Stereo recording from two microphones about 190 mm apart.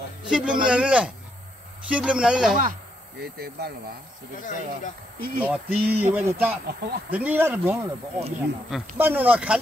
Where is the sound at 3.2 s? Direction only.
60° right (ahead or behind).